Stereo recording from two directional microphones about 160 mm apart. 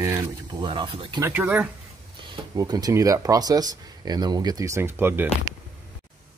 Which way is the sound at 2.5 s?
25° right (ahead or behind).